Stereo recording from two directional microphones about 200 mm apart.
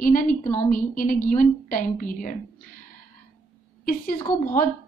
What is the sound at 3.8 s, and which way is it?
Speech, 45° left (ahead or behind).